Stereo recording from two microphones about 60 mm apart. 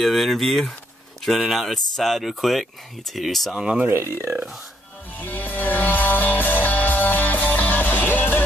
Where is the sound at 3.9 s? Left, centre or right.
Right.